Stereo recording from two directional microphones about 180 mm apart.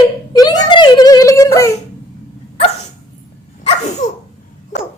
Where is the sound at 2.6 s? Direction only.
35° left (ahead or behind).